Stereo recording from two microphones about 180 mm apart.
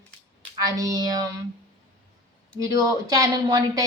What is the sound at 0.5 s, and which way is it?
Speech, 20° right (ahead or behind).